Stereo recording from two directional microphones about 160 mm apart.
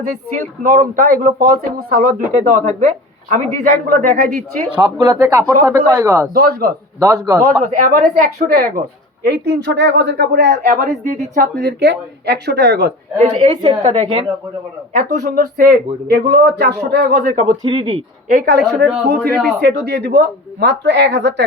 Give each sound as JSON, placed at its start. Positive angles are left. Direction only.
{"t": 0.3, "sound": "speech", "side_deg": -55}
{"t": 4.7, "sound": "speech", "side_deg": -25}
{"t": 6.3, "sound": "speech", "side_deg": -75}
{"t": 7.0, "sound": "speech", "side_deg": -20}
{"t": 7.7, "sound": "speech", "side_deg": -60}
{"t": 9.2, "sound": "speech", "side_deg": -90}
{"t": 13.1, "sound": "a woman's voice", "side_deg": -40}
{"t": 14.9, "sound": "speech", "side_deg": -55}
{"t": 17.4, "sound": "speech", "side_deg": -25}
{"t": 18.3, "sound": "speech", "side_deg": -75}
{"t": 18.8, "sound": "speech", "side_deg": -90}